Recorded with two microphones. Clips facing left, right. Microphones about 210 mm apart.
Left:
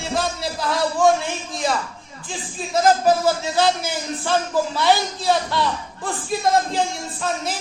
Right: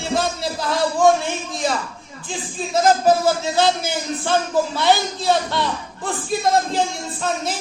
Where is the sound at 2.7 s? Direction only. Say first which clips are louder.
Right 1 dB; 25° right (ahead or behind).